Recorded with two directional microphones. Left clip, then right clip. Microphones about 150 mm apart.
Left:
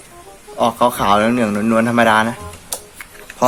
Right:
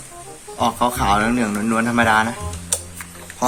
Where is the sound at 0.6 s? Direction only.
90° left.